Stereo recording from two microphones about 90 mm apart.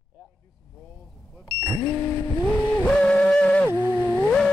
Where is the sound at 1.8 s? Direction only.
15° left (ahead or behind).